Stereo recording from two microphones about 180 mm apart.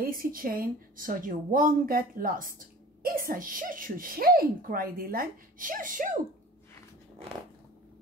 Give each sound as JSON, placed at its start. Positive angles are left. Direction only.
{"t": 0.0, "sound": "a woman's voice", "side_deg": -50}